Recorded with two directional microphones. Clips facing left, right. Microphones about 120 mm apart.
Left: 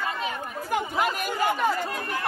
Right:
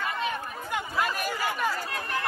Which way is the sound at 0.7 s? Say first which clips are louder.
Left 4 dB; 20° left (ahead or behind).